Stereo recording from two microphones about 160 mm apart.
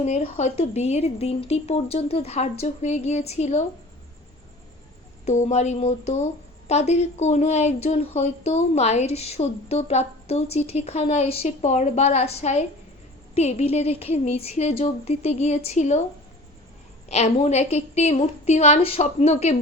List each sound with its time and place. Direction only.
0.0 s a woman's voice: 45° left (ahead or behind)
5.2 s speech: 45° left (ahead or behind)
17.1 s speech: 45° left (ahead or behind)